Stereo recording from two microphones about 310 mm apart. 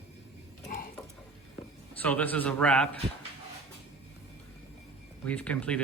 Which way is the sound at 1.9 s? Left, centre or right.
Centre.